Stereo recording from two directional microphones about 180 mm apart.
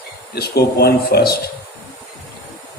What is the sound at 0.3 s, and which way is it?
Speech, 60° left (ahead or behind).